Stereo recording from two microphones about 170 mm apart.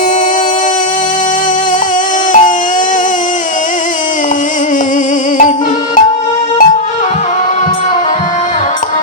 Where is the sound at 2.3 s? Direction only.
50° left (ahead or behind).